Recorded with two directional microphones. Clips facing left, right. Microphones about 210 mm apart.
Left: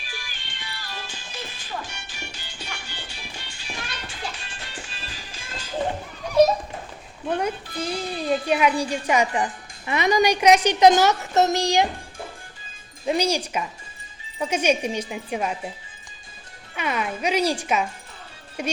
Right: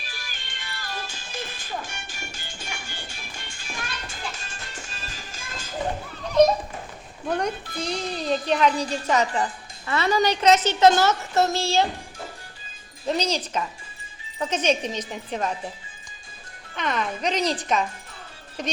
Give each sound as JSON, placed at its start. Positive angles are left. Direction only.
{"t": 0.0, "sound": "music", "side_deg": -40}
{"t": 6.2, "sound": "a woman's voice", "side_deg": 5}
{"t": 13.1, "sound": "a woman's voice", "side_deg": 10}
{"t": 16.7, "sound": "a woman's voice", "side_deg": 10}